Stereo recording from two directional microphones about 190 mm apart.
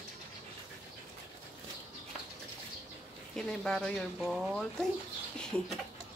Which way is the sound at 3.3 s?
Centre (ahead or behind).